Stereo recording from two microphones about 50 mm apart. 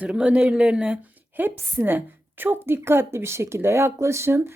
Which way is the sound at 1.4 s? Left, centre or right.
Right.